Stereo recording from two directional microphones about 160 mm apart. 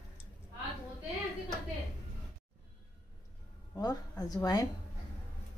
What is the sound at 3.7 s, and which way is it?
Speech, 20° left (ahead or behind).